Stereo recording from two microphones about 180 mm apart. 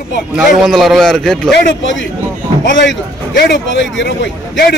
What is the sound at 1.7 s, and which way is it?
A man's voice, 90° left.